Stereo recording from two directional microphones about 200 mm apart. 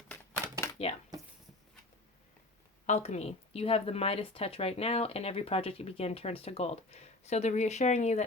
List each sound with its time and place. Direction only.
0.8 s speech: 30° left (ahead or behind)
2.8 s speech: 35° left (ahead or behind)